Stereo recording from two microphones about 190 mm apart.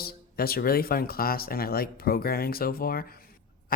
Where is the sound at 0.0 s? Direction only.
55° left (ahead or behind).